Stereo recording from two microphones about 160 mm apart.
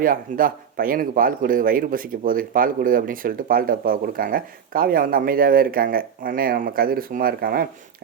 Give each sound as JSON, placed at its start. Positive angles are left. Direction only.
{"t": 0.0, "sound": "speech", "side_deg": -60}